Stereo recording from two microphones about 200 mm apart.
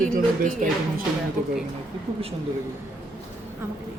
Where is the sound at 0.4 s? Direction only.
45° right (ahead or behind).